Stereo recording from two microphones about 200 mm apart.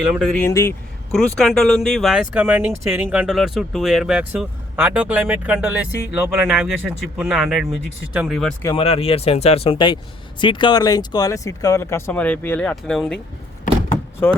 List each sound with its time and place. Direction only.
0.1 s speech: centre (ahead or behind)
0.4 s speech: 15° left (ahead or behind)
1.1 s speech: centre (ahead or behind)
8.6 s speech: 25° left (ahead or behind); by 13.1 s centre (ahead or behind)
13.7 s door: 40° left (ahead or behind)